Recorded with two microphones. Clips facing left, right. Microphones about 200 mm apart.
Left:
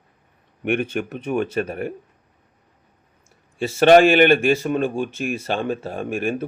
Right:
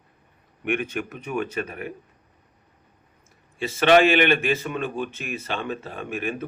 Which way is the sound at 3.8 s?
45° left (ahead or behind).